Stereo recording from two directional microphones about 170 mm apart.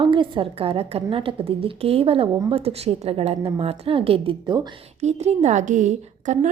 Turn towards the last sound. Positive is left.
turn(degrees=-45)  # may be behind; listen again after turning